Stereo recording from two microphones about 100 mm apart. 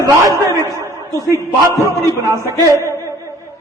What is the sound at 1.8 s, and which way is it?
Speech, 30° right (ahead or behind).